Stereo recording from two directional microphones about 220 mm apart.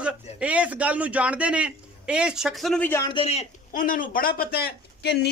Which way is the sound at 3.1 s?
25° left (ahead or behind).